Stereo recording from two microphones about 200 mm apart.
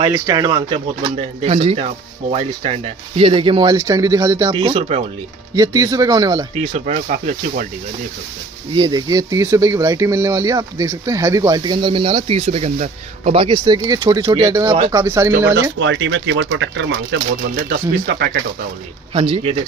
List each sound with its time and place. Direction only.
0.0 s speech: 15° right (ahead or behind)
1.1 s speech: 30° right (ahead or behind); by 4.5 s 15° right (ahead or behind)
4.5 s speech: 30° right (ahead or behind)
5.5 s speech: 15° right (ahead or behind)
6.6 s speech: 35° right (ahead or behind)
8.7 s speech: 20° right (ahead or behind)
15.8 s speech: 70° right (ahead or behind); by 18.3 s 50° right (ahead or behind)
19.1 s speech: 30° right (ahead or behind)